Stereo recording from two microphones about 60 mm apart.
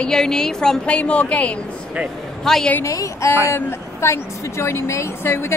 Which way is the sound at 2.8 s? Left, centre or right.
Left.